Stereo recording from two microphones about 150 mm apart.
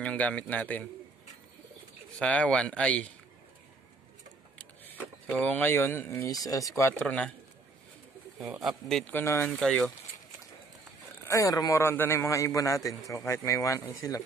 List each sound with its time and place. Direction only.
0.0 s speech: 10° left (ahead or behind)
2.1 s speech: 10° left (ahead or behind)
5.4 s speech: 10° left (ahead or behind)
8.4 s speech: centre (ahead or behind)
9.1 s speech: 15° left (ahead or behind)
9.5 s speech: centre (ahead or behind)
11.2 s a man's voice: 20° left (ahead or behind)